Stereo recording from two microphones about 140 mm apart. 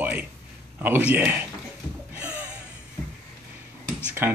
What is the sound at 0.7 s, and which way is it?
Speech, 15° right (ahead or behind).